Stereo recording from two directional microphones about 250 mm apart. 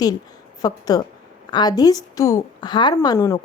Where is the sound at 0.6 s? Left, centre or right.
Centre.